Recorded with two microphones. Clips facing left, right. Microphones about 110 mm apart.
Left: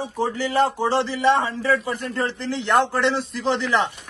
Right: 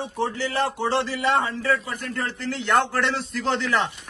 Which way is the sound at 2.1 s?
20° left (ahead or behind).